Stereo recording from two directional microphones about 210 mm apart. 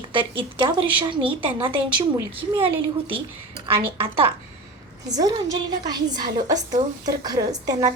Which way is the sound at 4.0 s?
25° right (ahead or behind).